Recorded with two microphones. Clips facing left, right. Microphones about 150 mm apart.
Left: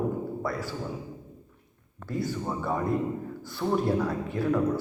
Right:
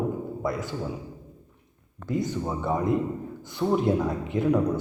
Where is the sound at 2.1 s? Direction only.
20° right (ahead or behind).